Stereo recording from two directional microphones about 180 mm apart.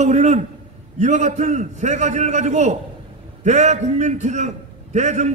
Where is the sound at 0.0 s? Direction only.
40° right (ahead or behind).